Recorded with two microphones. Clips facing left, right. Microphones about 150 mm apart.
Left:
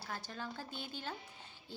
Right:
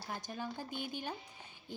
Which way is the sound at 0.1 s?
15° right (ahead or behind).